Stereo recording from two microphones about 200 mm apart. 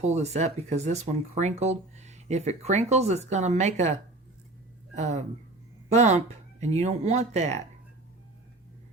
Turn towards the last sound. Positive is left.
turn(degrees=-35)  # may be behind; listen again after turning